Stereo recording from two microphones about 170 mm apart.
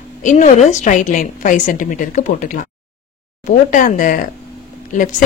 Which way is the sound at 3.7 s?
50° left (ahead or behind).